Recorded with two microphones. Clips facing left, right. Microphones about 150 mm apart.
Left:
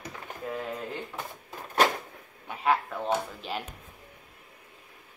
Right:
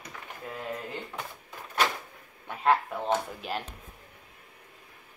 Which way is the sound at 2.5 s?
5° left (ahead or behind).